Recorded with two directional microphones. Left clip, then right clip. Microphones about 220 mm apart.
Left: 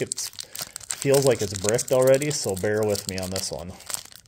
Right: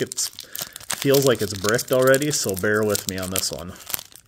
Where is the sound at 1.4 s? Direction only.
5° right (ahead or behind).